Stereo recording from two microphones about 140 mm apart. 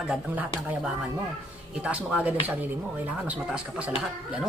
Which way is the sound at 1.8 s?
10° right (ahead or behind).